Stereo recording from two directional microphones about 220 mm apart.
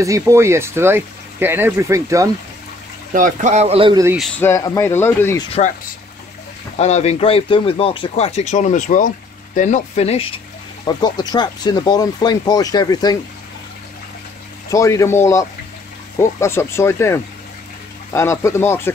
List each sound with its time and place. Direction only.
0.0 s speech: 15° right (ahead or behind)
3.1 s a man's voice: 35° right (ahead or behind)
4.0 s speech: 10° right (ahead or behind)
4.4 s speech: 15° left (ahead or behind)
6.8 s speech: 30° left (ahead or behind)
14.7 s speech: 15° left (ahead or behind)